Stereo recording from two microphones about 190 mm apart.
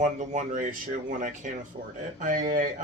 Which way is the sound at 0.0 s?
40° right (ahead or behind).